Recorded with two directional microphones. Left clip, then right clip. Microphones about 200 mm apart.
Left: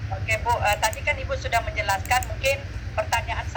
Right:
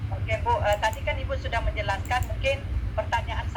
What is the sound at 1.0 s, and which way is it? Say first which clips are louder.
Speech: left 4 dB; 15° left (ahead or behind).